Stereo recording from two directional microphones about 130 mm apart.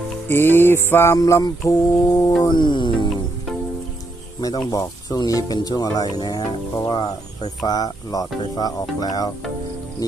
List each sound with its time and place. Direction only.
0.3 s music: 15° left (ahead or behind)
2.4 s speech: 35° left (ahead or behind)
4.4 s speech: 30° left (ahead or behind)
7.6 s music: 30° left (ahead or behind)